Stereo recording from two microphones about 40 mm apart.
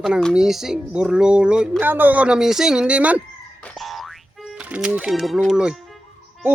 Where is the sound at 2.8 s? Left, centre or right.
Right.